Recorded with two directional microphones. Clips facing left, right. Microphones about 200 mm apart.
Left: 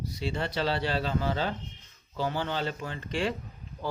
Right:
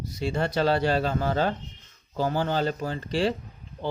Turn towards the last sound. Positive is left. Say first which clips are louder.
# right 5 dB
turn(degrees=-35)  # may be behind; listen again after turning